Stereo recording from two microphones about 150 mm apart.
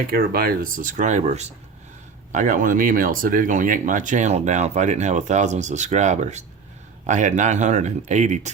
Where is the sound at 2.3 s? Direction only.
60° right (ahead or behind).